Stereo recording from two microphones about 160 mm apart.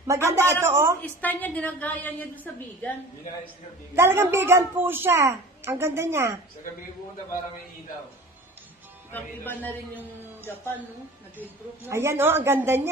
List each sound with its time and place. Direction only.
0.0 s a woman's voice: 20° right (ahead or behind)
1.0 s a woman's voice: 10° left (ahead or behind)
3.9 s a woman's voice: 15° right (ahead or behind)
9.1 s a woman's voice: 10° left (ahead or behind)
9.7 s a woman's voice: 15° right (ahead or behind)